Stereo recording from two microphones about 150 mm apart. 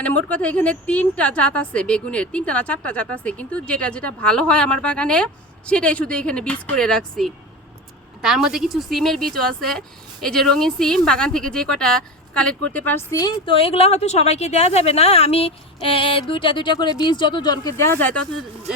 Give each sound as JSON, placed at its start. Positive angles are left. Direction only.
{"t": 0.0, "sound": "a woman's voice", "side_deg": 10}
{"t": 13.4, "sound": "a woman's voice", "side_deg": 35}